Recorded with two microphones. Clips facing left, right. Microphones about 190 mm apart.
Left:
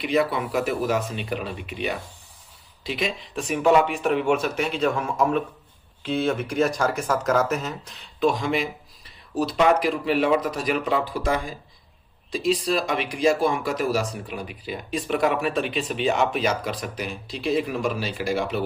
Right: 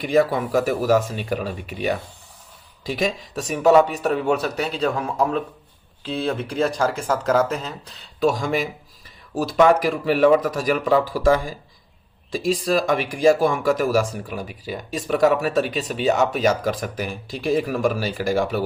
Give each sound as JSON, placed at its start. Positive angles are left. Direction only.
{"t": 0.0, "sound": "speech", "side_deg": -45}
{"t": 12.4, "sound": "speech", "side_deg": -45}